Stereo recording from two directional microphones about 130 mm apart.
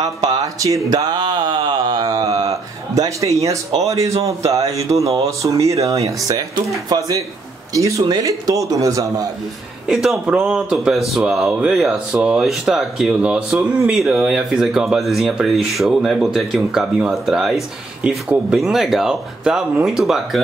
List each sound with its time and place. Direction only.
0.0 s speech: 30° right (ahead or behind)
7.7 s speech: 25° right (ahead or behind)
9.8 s speech: 5° right (ahead or behind)